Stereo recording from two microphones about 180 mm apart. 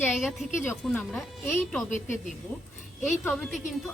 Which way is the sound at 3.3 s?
Centre (ahead or behind).